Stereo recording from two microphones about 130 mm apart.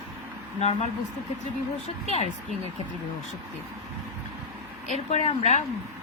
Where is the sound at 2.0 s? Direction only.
55° left (ahead or behind).